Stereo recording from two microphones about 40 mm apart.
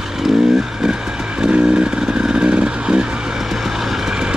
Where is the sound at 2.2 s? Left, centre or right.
Right.